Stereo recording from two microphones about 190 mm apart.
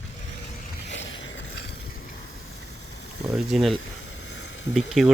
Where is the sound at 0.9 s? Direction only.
75° left (ahead or behind).